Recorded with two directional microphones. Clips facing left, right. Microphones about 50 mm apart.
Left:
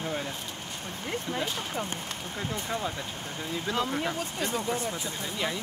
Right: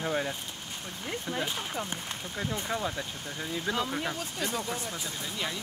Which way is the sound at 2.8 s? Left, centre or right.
Centre.